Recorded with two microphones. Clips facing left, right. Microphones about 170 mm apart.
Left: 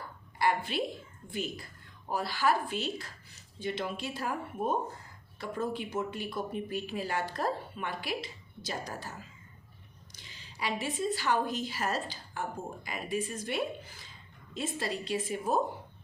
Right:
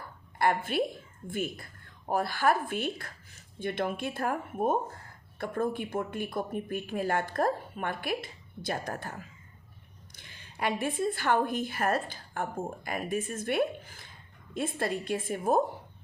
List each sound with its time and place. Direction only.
0.3 s a woman's voice: 50° right (ahead or behind)